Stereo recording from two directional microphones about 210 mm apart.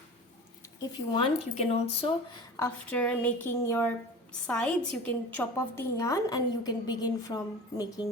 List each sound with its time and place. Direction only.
0.8 s speech: 25° left (ahead or behind)
2.6 s a woman's voice: 10° left (ahead or behind)